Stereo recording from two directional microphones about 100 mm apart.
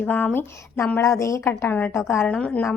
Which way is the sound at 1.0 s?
30° left (ahead or behind).